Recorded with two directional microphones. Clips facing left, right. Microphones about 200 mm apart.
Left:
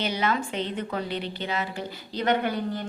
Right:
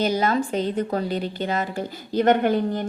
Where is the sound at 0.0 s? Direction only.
40° right (ahead or behind).